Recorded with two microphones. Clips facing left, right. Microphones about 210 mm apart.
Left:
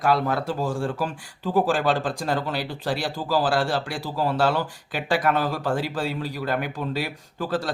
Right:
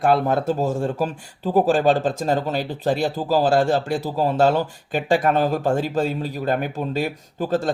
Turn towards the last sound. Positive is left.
turn(degrees=-45)  # may be behind; listen again after turning